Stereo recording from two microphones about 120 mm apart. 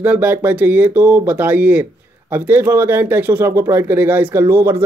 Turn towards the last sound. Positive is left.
turn(degrees=-20)  # may be behind; listen again after turning